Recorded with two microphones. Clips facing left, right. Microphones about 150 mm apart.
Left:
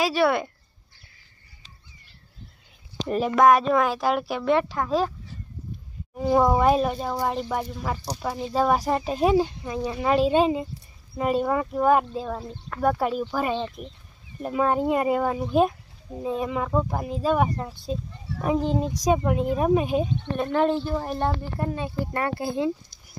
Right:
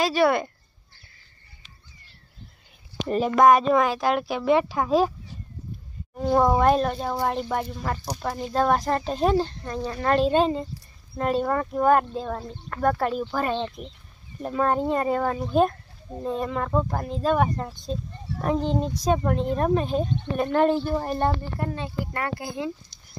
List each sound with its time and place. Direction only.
0.0 s speech: centre (ahead or behind)
3.1 s speech: centre (ahead or behind); by 5.1 s 15° right (ahead or behind)
6.1 s a child's voice: 5° left (ahead or behind)
21.5 s a child's voice: 15° left (ahead or behind)
22.0 s speech: 25° left (ahead or behind)